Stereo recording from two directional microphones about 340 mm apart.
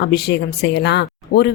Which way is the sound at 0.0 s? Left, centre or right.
Left.